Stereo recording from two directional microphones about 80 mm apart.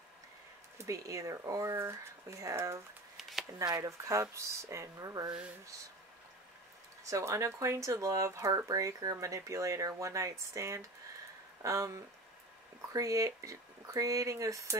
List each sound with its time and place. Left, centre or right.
0.7 s speech: right
3.2 s a sound: centre
3.8 s speech: right
7.1 s speech: right